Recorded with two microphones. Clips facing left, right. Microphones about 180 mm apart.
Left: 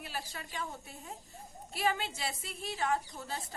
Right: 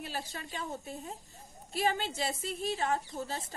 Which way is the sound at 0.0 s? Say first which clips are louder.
Right 3 dB; 30° right (ahead or behind).